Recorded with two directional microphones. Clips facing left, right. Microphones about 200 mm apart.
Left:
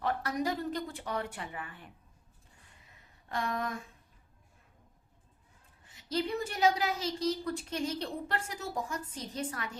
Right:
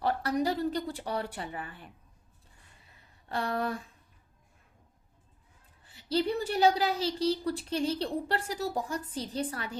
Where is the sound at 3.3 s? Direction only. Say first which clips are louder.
Right 3 dB; 35° right (ahead or behind).